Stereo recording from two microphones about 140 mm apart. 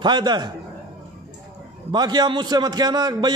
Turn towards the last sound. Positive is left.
turn(degrees=-30)  # may be behind; listen again after turning